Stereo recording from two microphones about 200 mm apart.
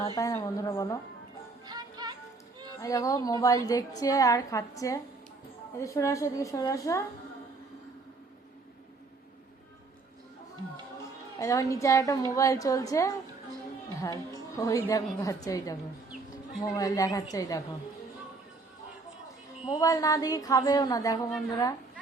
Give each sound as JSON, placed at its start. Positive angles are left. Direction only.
{"t": 0.2, "sound": "a woman's voice", "side_deg": 15}
{"t": 1.6, "sound": "music", "side_deg": -20}
{"t": 2.8, "sound": "a woman's voice", "side_deg": 15}
{"t": 11.3, "sound": "a woman's voice", "side_deg": 15}
{"t": 19.6, "sound": "a woman's voice", "side_deg": 20}